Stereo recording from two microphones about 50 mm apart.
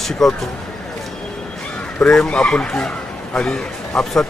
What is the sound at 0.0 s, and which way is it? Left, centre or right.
Speech, centre.